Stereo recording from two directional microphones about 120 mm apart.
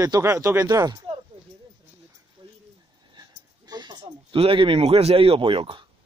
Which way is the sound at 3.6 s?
35° right (ahead or behind).